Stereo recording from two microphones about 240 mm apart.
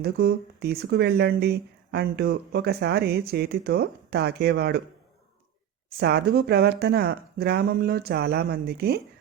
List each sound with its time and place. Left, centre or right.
0.0 s speech: right
6.0 s speech: right